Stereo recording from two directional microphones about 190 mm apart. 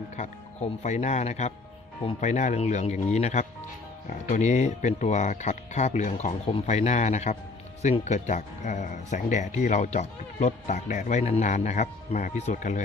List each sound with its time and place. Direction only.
0.2 s speech: 40° left (ahead or behind)